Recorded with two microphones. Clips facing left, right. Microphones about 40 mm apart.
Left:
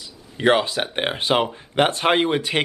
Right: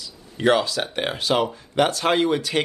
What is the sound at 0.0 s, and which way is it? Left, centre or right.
Speech, left.